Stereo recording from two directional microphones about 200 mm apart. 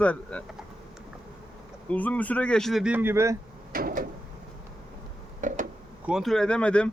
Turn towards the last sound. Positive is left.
turn(degrees=5)  # may be behind; listen again after turning